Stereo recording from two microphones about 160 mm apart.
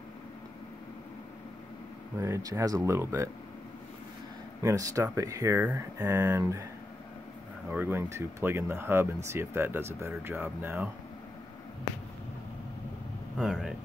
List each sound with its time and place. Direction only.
2.1 s speech: 20° right (ahead or behind)
4.6 s speech: 20° right (ahead or behind)
7.7 s speech: 15° right (ahead or behind)
13.4 s speech: centre (ahead or behind)